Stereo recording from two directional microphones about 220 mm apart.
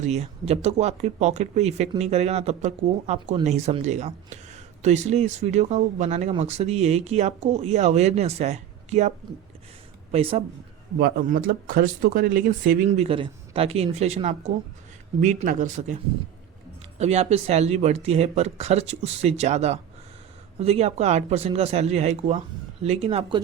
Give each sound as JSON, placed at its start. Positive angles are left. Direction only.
{"t": 0.0, "sound": "speech", "side_deg": -30}
{"t": 11.0, "sound": "speech", "side_deg": -40}
{"t": 17.0, "sound": "speech", "side_deg": -30}